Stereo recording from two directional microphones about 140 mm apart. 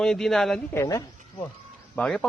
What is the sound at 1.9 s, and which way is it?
Speech, 5° left (ahead or behind).